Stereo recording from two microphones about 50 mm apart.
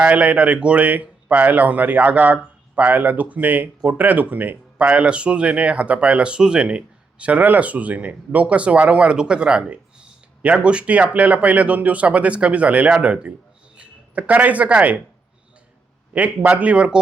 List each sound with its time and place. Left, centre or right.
0.0 s speech: right
4.9 s speech: right
16.1 s speech: right